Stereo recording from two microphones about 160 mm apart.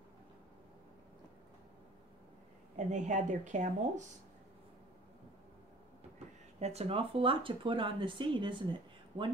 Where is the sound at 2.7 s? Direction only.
50° right (ahead or behind).